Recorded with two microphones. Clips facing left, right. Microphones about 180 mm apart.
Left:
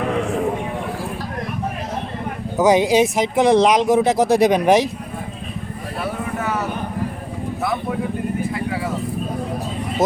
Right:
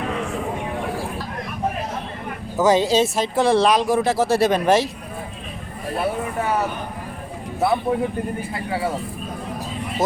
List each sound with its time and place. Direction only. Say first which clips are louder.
2.6 s speech: left 2 dB; 15° left (ahead or behind)
7.6 s vehicle: right 5 dB; 30° right (ahead or behind)